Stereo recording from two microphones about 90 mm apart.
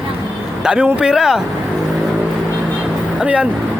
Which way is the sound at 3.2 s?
10° right (ahead or behind).